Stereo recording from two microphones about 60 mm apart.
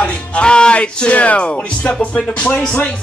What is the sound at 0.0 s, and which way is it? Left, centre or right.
Speech, centre.